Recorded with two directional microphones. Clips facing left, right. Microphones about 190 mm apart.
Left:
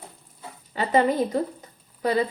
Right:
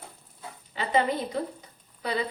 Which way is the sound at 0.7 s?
45° left (ahead or behind).